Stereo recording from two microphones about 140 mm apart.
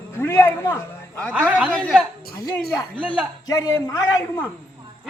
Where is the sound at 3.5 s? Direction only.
30° left (ahead or behind).